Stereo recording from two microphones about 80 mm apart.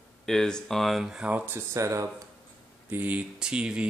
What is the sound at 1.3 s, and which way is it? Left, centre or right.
Speech, right.